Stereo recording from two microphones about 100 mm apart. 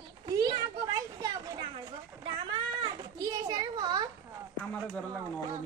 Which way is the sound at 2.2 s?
55° right (ahead or behind).